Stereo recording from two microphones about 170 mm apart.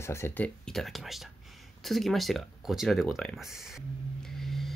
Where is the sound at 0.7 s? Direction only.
Centre (ahead or behind).